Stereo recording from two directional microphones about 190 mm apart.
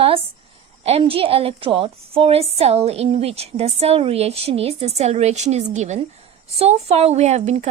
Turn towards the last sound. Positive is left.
turn(degrees=-35)  # may be behind; listen again after turning